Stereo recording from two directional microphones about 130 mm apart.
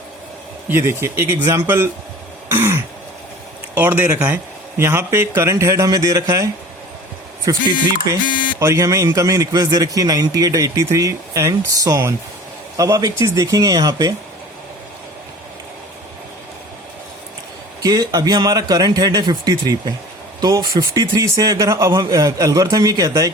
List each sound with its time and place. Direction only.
0.7 s a man's voice: 20° right (ahead or behind)
2.5 s throat clearing: 20° right (ahead or behind)
3.8 s a man's voice: 15° right (ahead or behind)
8.3 s a sound: 90° left
8.5 s a man's voice: 25° right (ahead or behind)
17.8 s a man's voice: 30° right (ahead or behind)